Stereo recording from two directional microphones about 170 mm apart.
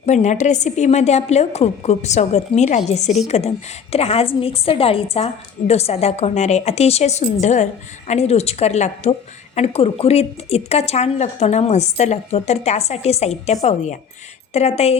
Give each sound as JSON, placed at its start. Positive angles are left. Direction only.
{"t": 0.0, "sound": "a woman's voice", "side_deg": 45}